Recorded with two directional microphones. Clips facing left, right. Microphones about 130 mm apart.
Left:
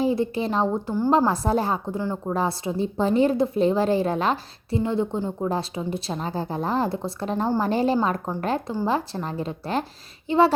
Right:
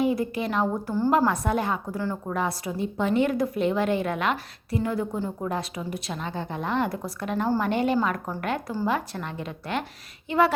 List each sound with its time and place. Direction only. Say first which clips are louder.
0.0 s a woman's voice: left 2 dB; 30° left (ahead or behind)